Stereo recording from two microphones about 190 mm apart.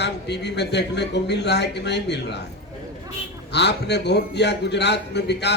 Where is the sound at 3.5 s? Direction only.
60° left (ahead or behind).